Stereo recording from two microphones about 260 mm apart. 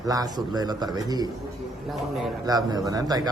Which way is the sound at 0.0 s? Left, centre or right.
Centre.